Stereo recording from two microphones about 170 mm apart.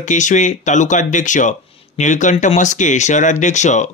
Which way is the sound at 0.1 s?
45° left (ahead or behind).